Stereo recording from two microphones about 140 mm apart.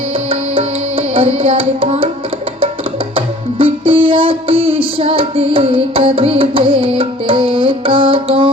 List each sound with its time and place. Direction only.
0.3 s music: 40° right (ahead or behind)
3.2 s music: 40° right (ahead or behind)